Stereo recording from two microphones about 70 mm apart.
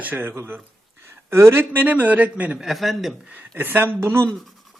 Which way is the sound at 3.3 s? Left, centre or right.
Right.